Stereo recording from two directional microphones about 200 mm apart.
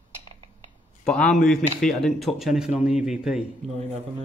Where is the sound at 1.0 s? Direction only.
5° left (ahead or behind).